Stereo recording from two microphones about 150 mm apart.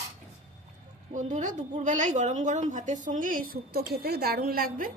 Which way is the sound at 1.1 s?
55° right (ahead or behind).